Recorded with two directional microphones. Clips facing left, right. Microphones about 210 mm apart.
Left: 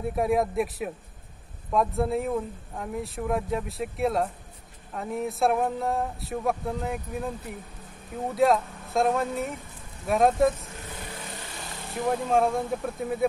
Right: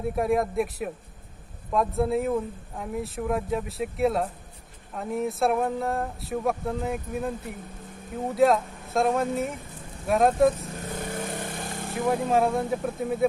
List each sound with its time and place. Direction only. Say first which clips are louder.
0.0 s speech: even; centre (ahead or behind)
8.4 s speech: right 1 dB; centre (ahead or behind)
10.6 s vehicle: right 6 dB; 45° right (ahead or behind)
12.1 s speech: right 1 dB; 5° right (ahead or behind)